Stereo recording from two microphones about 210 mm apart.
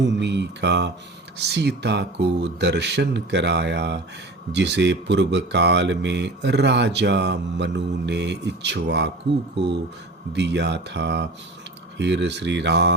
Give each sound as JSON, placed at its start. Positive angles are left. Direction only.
{"t": 0.0, "sound": "speech", "side_deg": -55}